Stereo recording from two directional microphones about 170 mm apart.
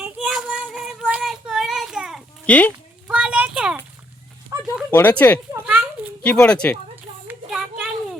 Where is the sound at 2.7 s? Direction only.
10° right (ahead or behind).